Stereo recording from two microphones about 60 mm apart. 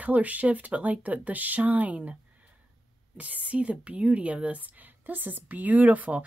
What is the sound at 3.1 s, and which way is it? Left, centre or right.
A woman's voice, right.